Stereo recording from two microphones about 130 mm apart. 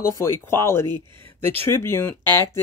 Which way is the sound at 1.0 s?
40° right (ahead or behind).